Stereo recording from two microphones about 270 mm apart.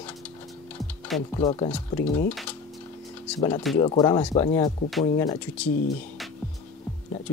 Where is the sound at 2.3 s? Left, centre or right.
Centre.